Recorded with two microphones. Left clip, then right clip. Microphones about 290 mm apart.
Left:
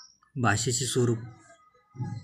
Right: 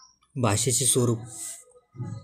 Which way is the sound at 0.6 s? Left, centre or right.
Right.